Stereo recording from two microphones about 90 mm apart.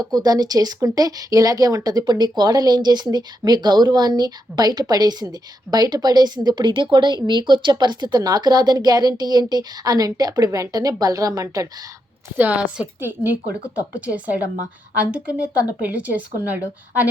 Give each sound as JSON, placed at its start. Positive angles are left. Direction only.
{"t": 0.0, "sound": "a woman's voice", "side_deg": -45}
{"t": 12.4, "sound": "speech", "side_deg": -15}
{"t": 15.1, "sound": "speech", "side_deg": -15}